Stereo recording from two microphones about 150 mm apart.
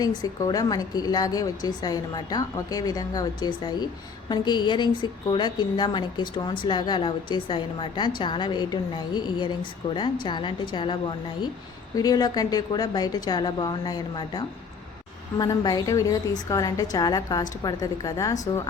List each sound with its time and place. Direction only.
0.0 s a woman's voice: 25° left (ahead or behind)
11.9 s a woman's voice: 25° left (ahead or behind)